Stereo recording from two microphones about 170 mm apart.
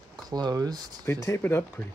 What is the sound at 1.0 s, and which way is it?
Speech, 15° left (ahead or behind).